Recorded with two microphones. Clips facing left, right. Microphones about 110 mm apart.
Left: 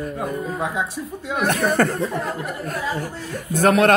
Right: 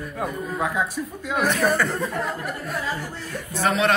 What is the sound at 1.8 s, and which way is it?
Speech, 55° left (ahead or behind).